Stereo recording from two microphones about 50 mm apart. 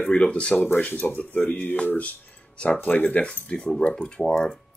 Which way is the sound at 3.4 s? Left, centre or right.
Left.